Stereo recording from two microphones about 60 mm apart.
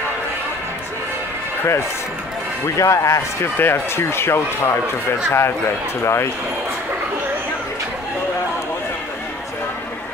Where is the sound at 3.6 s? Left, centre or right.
Left.